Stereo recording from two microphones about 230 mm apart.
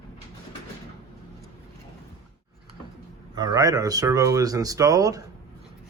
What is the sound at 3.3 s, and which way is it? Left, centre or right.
Speech, centre.